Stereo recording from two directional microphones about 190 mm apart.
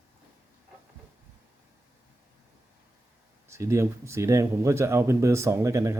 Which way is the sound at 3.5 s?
15° right (ahead or behind).